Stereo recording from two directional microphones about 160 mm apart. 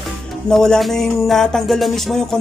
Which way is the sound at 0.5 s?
5° left (ahead or behind).